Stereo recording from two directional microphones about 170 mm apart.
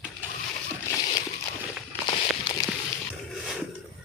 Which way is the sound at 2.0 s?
30° left (ahead or behind).